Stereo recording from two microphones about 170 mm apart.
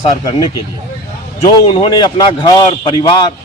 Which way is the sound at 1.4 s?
30° left (ahead or behind).